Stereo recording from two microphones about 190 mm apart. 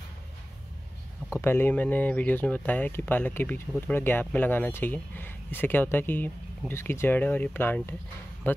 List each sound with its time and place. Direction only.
1.4 s speech: 10° left (ahead or behind)